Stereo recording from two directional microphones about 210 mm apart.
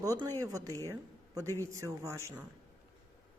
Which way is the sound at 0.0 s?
15° right (ahead or behind).